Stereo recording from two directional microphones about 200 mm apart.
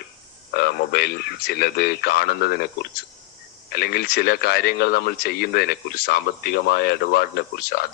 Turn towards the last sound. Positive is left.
turn(degrees=50)  # may be behind; listen again after turning